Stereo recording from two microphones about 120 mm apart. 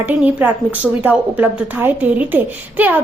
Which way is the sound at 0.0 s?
15° right (ahead or behind).